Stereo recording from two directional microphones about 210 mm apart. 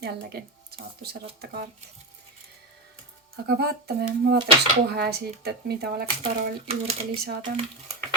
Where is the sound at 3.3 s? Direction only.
50° right (ahead or behind).